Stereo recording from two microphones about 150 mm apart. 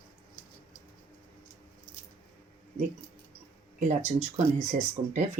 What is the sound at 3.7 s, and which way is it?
Speech, 55° right (ahead or behind).